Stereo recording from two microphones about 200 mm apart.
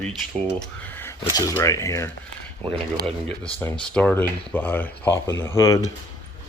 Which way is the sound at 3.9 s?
5° left (ahead or behind).